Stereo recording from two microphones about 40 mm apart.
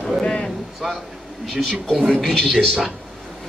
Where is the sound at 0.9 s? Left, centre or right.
Centre.